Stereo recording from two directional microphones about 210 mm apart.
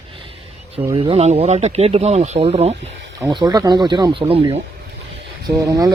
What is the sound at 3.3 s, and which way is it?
Speech, 20° right (ahead or behind).